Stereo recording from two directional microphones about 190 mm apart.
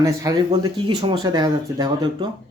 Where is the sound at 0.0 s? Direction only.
20° right (ahead or behind).